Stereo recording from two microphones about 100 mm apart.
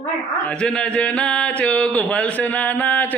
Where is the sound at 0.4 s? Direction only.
10° left (ahead or behind).